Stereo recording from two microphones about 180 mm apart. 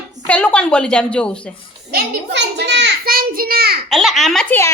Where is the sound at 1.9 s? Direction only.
65° right (ahead or behind).